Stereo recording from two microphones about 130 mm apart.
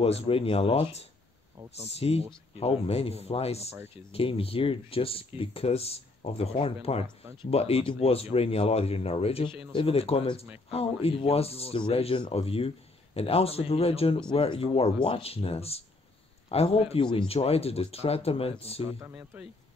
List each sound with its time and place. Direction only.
0.0 s a man's voice: 50° left (ahead or behind)
18.9 s speech: 20° right (ahead or behind)
19.1 s speech: 10° right (ahead or behind)